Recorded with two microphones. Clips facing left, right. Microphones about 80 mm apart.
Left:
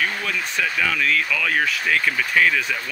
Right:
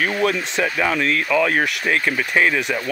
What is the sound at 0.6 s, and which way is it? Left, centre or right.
Speech, right.